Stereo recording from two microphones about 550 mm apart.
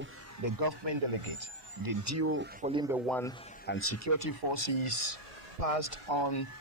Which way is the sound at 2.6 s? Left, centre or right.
Centre.